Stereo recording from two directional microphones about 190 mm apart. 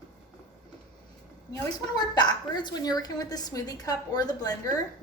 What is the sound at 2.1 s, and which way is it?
A woman's voice, 20° left (ahead or behind).